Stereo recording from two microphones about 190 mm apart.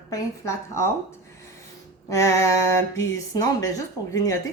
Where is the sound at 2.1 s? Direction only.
15° left (ahead or behind).